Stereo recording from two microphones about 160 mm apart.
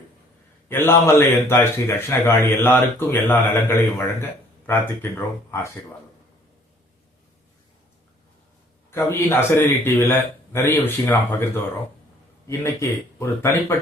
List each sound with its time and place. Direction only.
0.7 s a man's voice: 15° left (ahead or behind)
8.9 s a man's voice: 15° left (ahead or behind)